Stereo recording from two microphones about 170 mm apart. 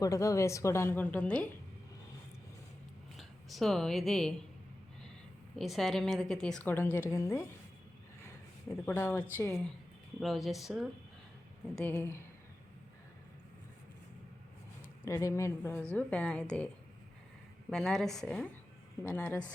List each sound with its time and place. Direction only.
0.0 s a woman's voice: 20° left (ahead or behind)
3.2 s speech: centre (ahead or behind)
5.5 s a woman's voice: centre (ahead or behind); by 7.4 s 15° left (ahead or behind)
8.7 s a woman's voice: 15° left (ahead or behind)
10.2 s a woman's voice: centre (ahead or behind)
11.9 s a woman's voice: 15° left (ahead or behind)
15.0 s a woman's voice: 15° left (ahead or behind)
17.7 s a woman's voice: 5° left (ahead or behind)